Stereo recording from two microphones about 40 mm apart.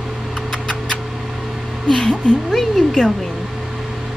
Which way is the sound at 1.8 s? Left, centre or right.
Centre.